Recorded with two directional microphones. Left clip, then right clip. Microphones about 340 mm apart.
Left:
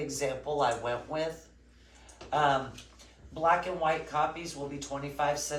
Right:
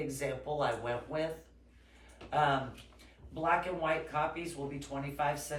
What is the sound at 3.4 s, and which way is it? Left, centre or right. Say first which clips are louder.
Speech: left 4 dB; centre.